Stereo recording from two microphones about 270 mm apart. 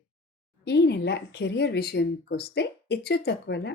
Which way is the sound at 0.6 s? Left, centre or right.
Left.